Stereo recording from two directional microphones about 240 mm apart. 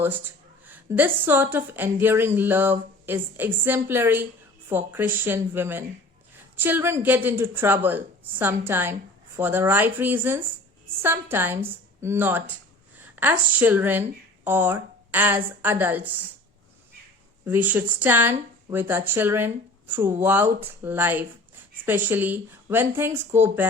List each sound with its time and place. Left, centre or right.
0.7 s a woman's voice: centre
17.4 s a woman's voice: centre